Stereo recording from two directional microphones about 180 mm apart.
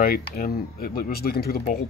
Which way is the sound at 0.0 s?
55° left (ahead or behind).